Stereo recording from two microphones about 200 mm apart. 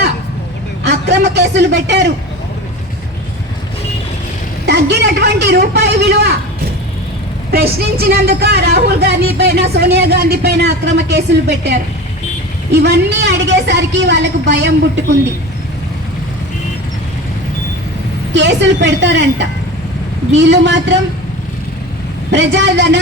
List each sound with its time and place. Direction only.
0.9 s music: 55° right (ahead or behind)
1.9 s speech: 60° right (ahead or behind)
4.6 s speech: 55° right (ahead or behind)
7.5 s a woman's voice: 50° right (ahead or behind)
18.3 s speech: 60° right (ahead or behind)
22.3 s speech: 60° right (ahead or behind)